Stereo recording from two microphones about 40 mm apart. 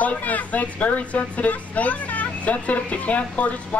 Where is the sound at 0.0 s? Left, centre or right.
Left.